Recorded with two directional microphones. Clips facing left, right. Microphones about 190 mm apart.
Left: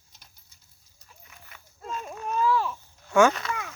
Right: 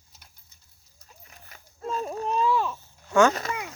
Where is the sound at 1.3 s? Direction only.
35° right (ahead or behind); by 2.7 s 20° right (ahead or behind).